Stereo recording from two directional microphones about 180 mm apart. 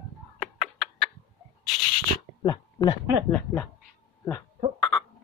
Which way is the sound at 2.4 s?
20° left (ahead or behind).